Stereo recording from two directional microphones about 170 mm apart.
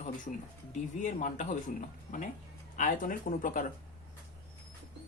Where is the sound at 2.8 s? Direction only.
50° left (ahead or behind).